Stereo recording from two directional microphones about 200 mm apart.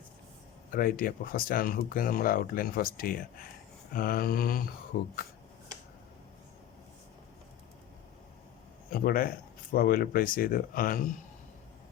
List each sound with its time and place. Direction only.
0.7 s speech: 45° left (ahead or behind)
8.9 s speech: 45° left (ahead or behind)